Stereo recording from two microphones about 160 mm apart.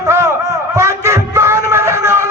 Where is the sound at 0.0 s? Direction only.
20° right (ahead or behind).